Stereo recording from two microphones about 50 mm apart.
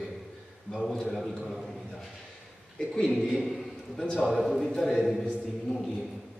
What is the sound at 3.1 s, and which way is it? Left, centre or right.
A man's voice, centre.